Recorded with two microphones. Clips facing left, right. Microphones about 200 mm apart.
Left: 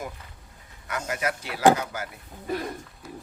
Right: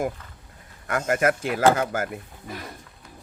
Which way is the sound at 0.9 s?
50° right (ahead or behind).